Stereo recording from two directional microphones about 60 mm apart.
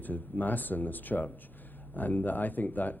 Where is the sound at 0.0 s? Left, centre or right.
Left.